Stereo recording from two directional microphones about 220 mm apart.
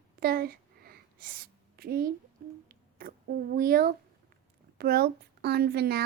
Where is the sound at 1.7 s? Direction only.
45° right (ahead or behind).